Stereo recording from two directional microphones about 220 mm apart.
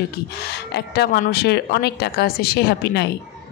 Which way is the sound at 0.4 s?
45° left (ahead or behind).